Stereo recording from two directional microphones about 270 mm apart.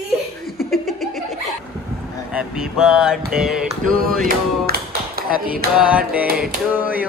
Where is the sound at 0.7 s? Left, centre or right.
Centre.